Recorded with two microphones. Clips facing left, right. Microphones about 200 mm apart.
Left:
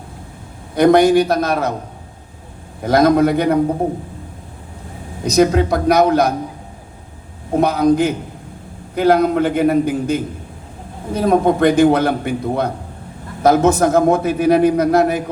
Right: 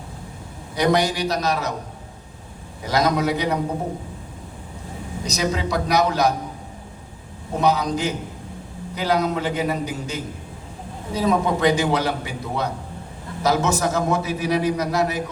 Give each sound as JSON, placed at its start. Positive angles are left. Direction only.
{"t": 0.8, "sound": "a man's voice", "side_deg": 55}
{"t": 2.8, "sound": "a man's voice", "side_deg": 55}
{"t": 5.2, "sound": "a man's voice", "side_deg": 55}
{"t": 7.5, "sound": "a man's voice", "side_deg": 55}